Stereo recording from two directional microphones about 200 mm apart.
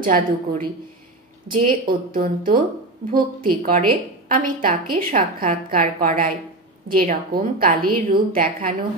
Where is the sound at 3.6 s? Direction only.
45° right (ahead or behind).